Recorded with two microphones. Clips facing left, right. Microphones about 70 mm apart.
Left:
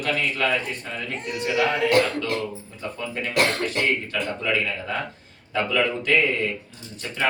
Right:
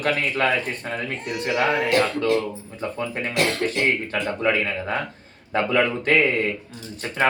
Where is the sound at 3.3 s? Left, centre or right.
Left.